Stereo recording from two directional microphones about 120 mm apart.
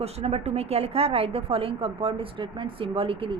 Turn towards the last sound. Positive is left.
turn(degrees=-50)  # may be behind; listen again after turning